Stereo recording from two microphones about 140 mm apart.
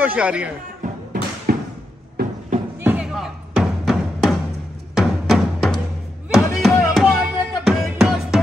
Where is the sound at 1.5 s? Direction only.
90° right.